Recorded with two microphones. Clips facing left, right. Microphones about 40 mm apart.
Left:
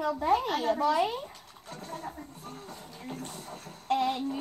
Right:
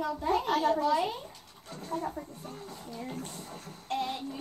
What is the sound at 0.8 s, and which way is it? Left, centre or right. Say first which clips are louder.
Speech: left 1 dB; centre.